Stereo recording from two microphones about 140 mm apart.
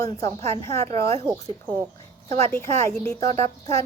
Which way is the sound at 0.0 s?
25° left (ahead or behind).